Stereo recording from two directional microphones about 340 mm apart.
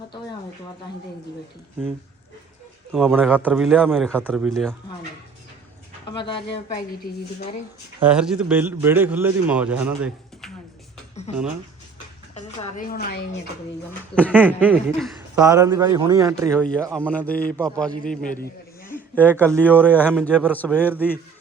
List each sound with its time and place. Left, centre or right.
2.9 s a man's voice: centre
6.2 s speech: centre
7.1 s a woman's voice: left
8.0 s a man's voice: centre
11.1 s a sound: centre
12.3 s a woman's voice: centre
14.2 s a man's voice: centre
16.6 s a man's voice: centre